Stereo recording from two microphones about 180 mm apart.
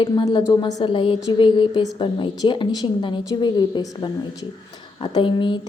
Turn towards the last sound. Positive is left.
turn(degrees=25)  # may be behind; listen again after turning